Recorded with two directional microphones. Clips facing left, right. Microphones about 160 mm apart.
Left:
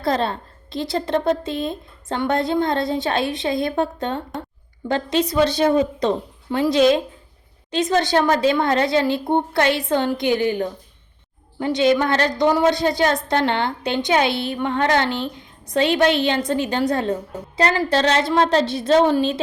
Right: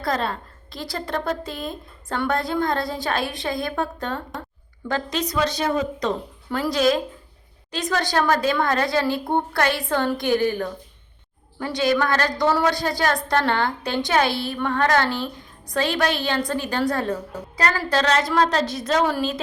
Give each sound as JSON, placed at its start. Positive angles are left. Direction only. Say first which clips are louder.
{"t": 0.0, "sound": "a woman's voice", "louder": "left 4 dB", "side_deg": 25}